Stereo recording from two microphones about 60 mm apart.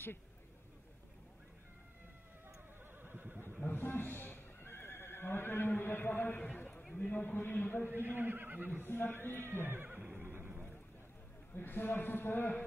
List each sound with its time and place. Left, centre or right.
3.0 s neigh: right
3.6 s neigh: left
7.1 s speech: left
7.9 s speech: right
8.8 s speech: left
9.6 s speech: right
9.8 s neigh: right
11.5 s speech: left